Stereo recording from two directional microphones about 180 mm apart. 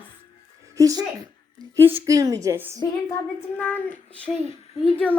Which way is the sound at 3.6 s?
10° left (ahead or behind).